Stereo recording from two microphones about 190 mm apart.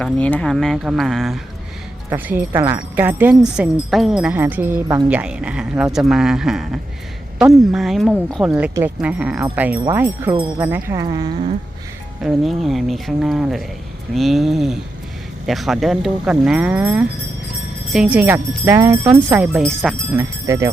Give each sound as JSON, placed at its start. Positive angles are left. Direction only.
{"t": 0.0, "sound": "speech", "side_deg": 5}
{"t": 2.0, "sound": "speech", "side_deg": -10}
{"t": 12.2, "sound": "speech", "side_deg": 0}
{"t": 20.1, "sound": "speech", "side_deg": -15}